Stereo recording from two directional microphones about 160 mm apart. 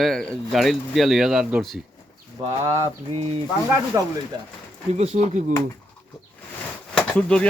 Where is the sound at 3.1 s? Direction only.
40° right (ahead or behind).